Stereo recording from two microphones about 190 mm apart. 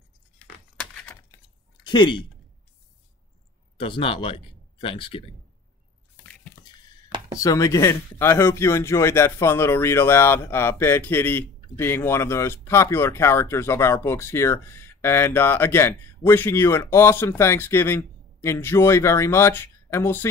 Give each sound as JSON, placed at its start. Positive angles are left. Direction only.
{"t": 1.9, "sound": "speech", "side_deg": 25}
{"t": 3.7, "sound": "speech", "side_deg": 25}
{"t": 6.2, "sound": "a sound", "side_deg": 5}
{"t": 7.3, "sound": "speech", "side_deg": 15}